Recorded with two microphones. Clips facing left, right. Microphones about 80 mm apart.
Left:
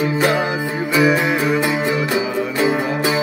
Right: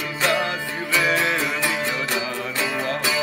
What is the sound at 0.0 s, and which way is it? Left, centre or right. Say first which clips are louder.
Music: left 6 dB; left.